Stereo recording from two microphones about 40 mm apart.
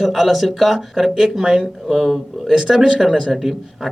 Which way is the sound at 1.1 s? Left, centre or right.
Centre.